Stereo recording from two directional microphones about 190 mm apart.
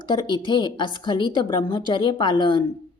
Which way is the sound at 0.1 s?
20° left (ahead or behind).